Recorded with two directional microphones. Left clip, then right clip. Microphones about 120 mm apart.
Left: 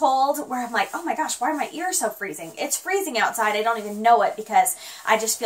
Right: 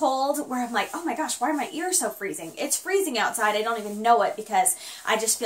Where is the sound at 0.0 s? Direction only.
30° right (ahead or behind).